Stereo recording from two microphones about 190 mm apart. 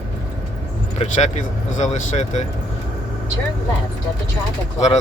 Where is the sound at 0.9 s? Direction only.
35° left (ahead or behind).